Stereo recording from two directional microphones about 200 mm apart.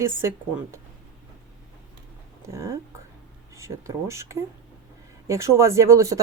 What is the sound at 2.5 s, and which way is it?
Speech, 15° right (ahead or behind).